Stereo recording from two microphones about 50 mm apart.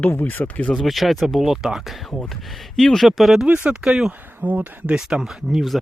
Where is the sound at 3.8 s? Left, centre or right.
Centre.